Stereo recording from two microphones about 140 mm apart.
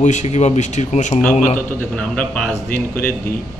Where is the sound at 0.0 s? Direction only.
55° left (ahead or behind).